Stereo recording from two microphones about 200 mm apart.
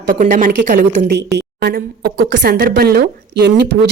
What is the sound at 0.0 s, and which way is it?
A woman's voice, 40° right (ahead or behind).